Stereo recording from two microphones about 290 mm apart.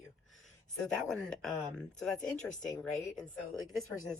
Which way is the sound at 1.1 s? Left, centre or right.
Centre.